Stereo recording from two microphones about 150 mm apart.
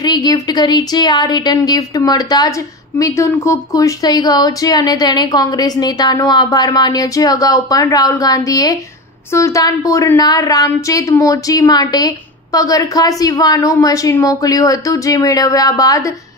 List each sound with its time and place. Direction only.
0.0 s speech: 25° left (ahead or behind)